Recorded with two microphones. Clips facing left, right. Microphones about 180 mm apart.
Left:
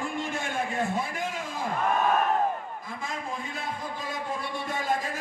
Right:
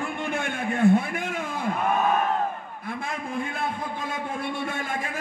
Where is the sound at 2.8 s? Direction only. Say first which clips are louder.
Right 7 dB; 60° right (ahead or behind).